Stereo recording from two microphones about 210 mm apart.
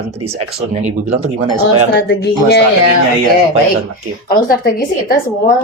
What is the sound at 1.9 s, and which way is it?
Speech, 55° left (ahead or behind).